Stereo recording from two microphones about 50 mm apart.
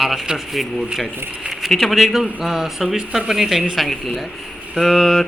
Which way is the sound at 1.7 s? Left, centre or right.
Centre.